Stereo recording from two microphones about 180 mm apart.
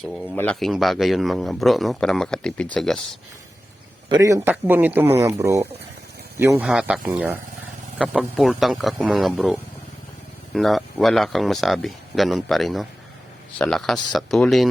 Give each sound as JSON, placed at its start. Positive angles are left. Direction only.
{"t": 0.3, "sound": "a man's voice", "side_deg": 5}
{"t": 4.1, "sound": "a man's voice", "side_deg": -20}